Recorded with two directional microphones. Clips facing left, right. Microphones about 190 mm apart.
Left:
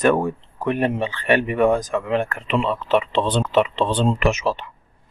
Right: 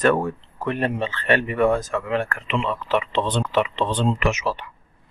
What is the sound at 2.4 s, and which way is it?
Speech, 30° left (ahead or behind).